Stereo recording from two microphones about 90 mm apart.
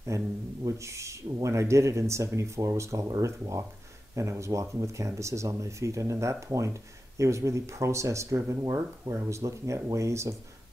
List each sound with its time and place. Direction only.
0.1 s speech: 35° right (ahead or behind)